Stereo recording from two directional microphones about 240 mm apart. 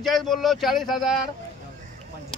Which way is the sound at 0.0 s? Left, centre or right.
Centre.